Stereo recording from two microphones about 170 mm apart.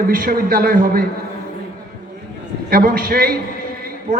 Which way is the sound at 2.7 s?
60° right (ahead or behind).